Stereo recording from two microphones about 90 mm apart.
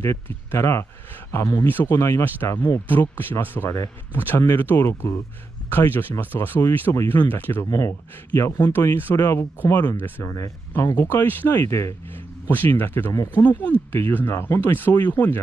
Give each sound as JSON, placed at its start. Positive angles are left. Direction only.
{"t": 0.0, "sound": "speech", "side_deg": 30}
{"t": 1.9, "sound": "speech", "side_deg": 30}
{"t": 8.7, "sound": "speech", "side_deg": 25}